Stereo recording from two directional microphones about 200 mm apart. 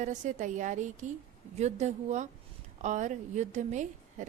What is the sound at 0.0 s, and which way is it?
Speech, 35° right (ahead or behind).